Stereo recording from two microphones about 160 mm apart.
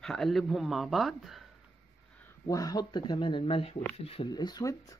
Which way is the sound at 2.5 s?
20° left (ahead or behind).